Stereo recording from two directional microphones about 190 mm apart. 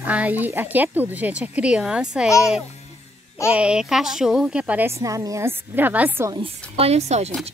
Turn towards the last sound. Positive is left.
turn(degrees=-35)  # may be behind; listen again after turning